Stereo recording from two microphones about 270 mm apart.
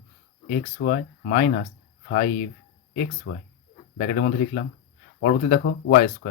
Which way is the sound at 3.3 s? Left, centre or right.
Left.